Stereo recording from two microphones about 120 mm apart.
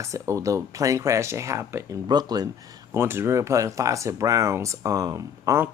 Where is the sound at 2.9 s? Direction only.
20° right (ahead or behind).